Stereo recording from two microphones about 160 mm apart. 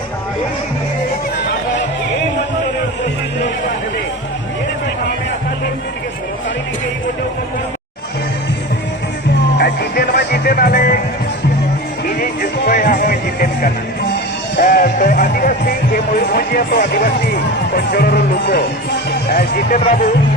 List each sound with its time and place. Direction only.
9.6 s music: 80° left; by 11.0 s 65° left (ahead or behind)
12.0 s music: 65° left (ahead or behind); by 19.8 s 80° left